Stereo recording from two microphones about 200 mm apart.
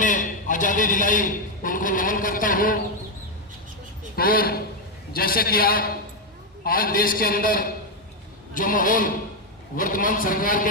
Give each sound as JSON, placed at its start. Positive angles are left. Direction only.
{"t": 0.0, "sound": "a man's voice", "side_deg": 40}
{"t": 4.1, "sound": "a man's voice", "side_deg": 50}